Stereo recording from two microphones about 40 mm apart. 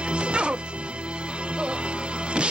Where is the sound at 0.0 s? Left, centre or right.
Right.